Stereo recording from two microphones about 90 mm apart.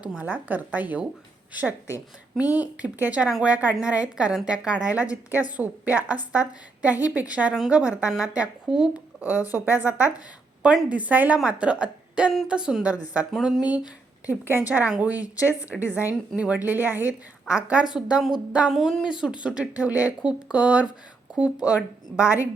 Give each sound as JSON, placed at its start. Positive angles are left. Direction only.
{"t": 0.0, "sound": "a woman's voice", "side_deg": -15}
{"t": 2.4, "sound": "a woman's voice", "side_deg": -15}
{"t": 9.5, "sound": "a woman's voice", "side_deg": -20}
{"t": 13.7, "sound": "a woman's voice", "side_deg": -15}